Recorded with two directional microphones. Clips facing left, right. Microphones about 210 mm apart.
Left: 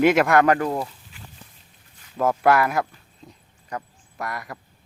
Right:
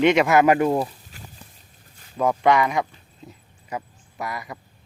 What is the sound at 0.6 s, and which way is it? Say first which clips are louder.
Speech: right 5 dB; 20° right (ahead or behind).